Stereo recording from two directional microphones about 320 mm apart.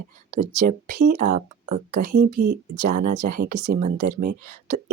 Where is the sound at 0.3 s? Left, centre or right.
Right.